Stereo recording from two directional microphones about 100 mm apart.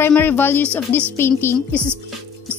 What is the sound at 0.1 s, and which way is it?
A woman's voice, 20° left (ahead or behind).